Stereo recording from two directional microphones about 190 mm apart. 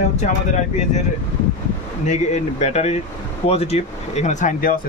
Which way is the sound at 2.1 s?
35° left (ahead or behind).